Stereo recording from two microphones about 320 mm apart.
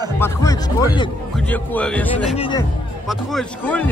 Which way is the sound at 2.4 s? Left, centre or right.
Centre.